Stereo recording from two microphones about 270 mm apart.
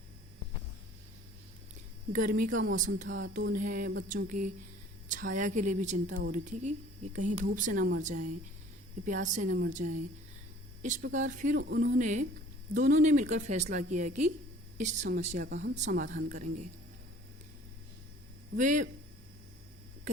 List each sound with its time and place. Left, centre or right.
2.1 s a woman's voice: right
2.6 s a sound: right
4.1 s a woman's voice: right
18.5 s a woman's voice: right